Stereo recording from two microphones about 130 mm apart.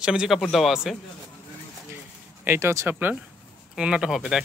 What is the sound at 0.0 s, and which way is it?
Speech, 5° right (ahead or behind).